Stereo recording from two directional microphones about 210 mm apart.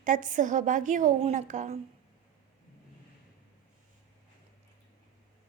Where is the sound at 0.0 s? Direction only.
40° right (ahead or behind).